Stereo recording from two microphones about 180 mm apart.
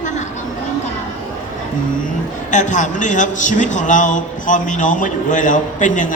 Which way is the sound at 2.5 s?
45° left (ahead or behind).